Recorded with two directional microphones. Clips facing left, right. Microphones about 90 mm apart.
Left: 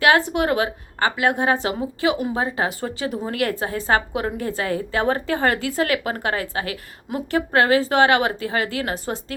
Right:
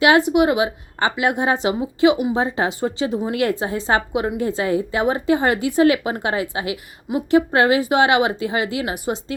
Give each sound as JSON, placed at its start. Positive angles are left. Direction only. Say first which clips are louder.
{"t": 0.0, "sound": "a woman's voice", "louder": "right 3 dB", "side_deg": -20}